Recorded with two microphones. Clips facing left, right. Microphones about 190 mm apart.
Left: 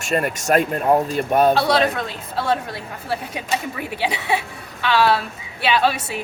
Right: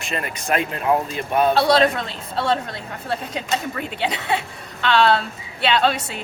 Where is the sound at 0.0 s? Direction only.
45° left (ahead or behind).